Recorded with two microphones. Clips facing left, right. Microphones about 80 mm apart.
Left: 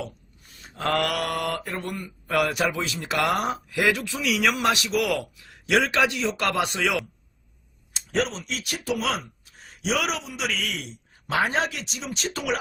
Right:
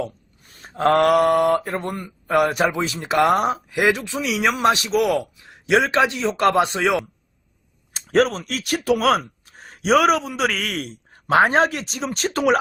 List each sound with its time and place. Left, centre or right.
0.0 s speech: right
2.3 s a man's voice: right
7.9 s speech: right